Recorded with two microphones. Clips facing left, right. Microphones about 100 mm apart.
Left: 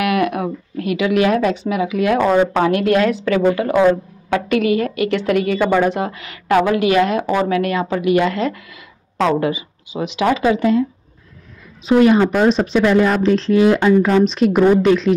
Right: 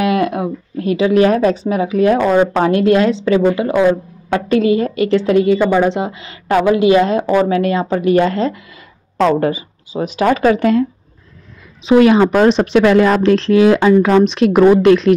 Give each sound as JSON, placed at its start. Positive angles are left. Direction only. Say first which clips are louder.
{"t": 0.0, "sound": "a woman's voice", "louder": "right 2 dB", "side_deg": -30}
{"t": 9.2, "sound": "speech", "louder": "right 3 dB", "side_deg": -45}
{"t": 11.8, "sound": "speech", "louder": "right 3 dB", "side_deg": -90}